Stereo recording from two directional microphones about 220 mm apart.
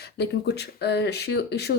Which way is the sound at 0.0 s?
50° left (ahead or behind).